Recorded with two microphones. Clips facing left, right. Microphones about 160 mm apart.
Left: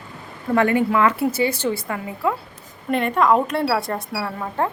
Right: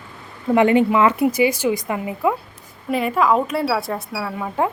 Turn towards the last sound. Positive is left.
turn(degrees=-10)  # may be behind; listen again after turning